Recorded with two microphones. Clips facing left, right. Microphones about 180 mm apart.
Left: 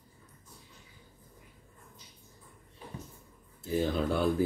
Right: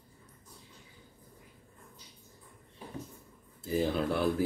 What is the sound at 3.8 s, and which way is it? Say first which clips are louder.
Speech: left 1 dB; centre (ahead or behind).